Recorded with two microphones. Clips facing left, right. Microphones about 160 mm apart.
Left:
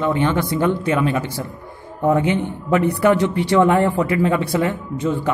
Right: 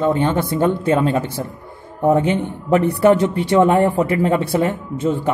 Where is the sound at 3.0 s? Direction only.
25° right (ahead or behind).